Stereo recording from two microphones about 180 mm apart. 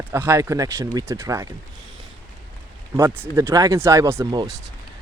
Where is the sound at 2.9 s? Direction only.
10° right (ahead or behind).